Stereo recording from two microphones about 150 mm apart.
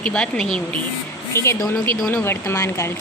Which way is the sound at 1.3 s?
20° left (ahead or behind).